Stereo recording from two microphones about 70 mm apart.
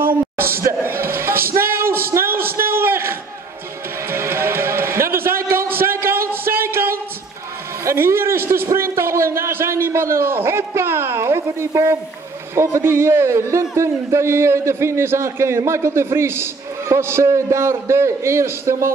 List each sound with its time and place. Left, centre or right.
0.1 s a sound: right
4.1 s music: right
7.8 s a man's voice: right